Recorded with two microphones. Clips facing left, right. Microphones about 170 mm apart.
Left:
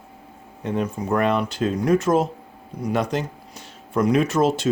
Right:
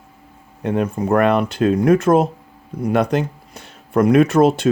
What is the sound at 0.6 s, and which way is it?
Speech, 60° right (ahead or behind).